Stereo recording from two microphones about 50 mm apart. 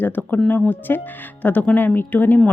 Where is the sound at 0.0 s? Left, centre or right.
Left.